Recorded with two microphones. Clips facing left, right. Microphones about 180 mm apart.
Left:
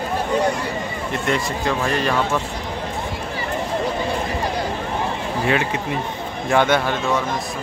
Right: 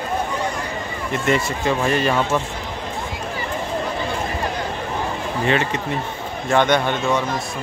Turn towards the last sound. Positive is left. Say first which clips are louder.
# even
turn(degrees=5)  # may be behind; listen again after turning